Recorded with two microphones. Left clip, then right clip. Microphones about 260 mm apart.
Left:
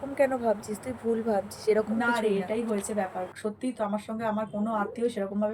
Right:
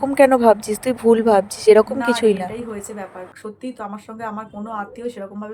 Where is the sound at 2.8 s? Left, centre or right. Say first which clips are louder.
Left 1 dB; centre.